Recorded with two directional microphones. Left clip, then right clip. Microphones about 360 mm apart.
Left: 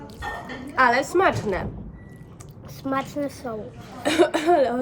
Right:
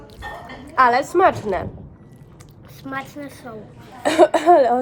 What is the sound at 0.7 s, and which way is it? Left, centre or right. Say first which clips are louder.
Speech: right 3 dB; centre.